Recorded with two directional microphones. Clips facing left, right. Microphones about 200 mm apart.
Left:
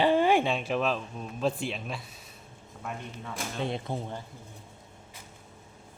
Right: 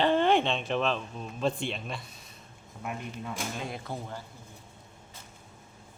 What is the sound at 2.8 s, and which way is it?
Speech, 10° right (ahead or behind).